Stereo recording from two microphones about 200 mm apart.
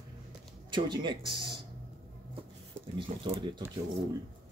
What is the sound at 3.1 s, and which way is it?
Speech, 40° right (ahead or behind).